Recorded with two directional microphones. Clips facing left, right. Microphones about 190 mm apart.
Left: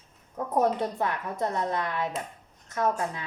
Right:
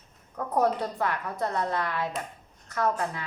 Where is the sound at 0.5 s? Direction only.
20° left (ahead or behind).